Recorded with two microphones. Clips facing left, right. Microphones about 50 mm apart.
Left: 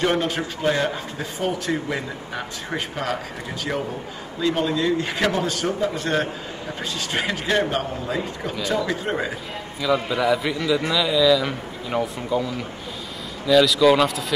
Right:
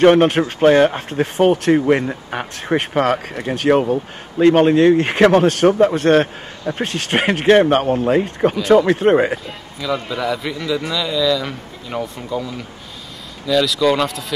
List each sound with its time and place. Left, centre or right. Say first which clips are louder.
0.0 s speech: right 11 dB; right
9.8 s a man's voice: left 1 dB; centre
13.5 s a man's voice: even; centre